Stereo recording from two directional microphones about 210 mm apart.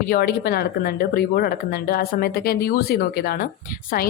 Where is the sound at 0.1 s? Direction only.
45° left (ahead or behind).